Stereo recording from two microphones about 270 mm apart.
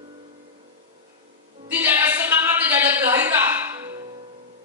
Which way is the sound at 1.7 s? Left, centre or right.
Centre.